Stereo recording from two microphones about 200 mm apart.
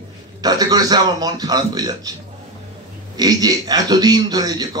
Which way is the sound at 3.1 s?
20° right (ahead or behind).